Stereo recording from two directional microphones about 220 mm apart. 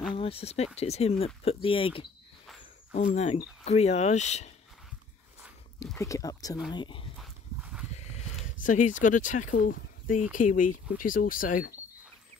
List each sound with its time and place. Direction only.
0.1 s speech: 25° left (ahead or behind)
5.9 s speech: 15° left (ahead or behind)
7.2 s dog: 5° right (ahead or behind)
7.9 s horse: 30° left (ahead or behind)
8.6 s speech: 35° left (ahead or behind)